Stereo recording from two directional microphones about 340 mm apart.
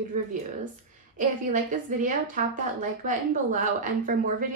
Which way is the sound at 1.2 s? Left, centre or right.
Right.